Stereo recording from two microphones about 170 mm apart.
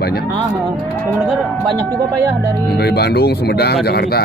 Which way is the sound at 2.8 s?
75° left (ahead or behind).